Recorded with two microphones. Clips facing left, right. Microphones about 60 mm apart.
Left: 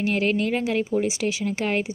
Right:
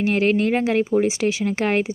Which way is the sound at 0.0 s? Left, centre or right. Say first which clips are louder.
Right 4 dB; right.